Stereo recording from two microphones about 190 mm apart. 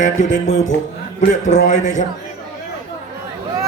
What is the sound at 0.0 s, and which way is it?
Speech, 40° left (ahead or behind).